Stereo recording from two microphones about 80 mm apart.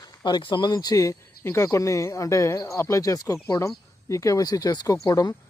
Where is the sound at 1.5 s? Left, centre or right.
Left.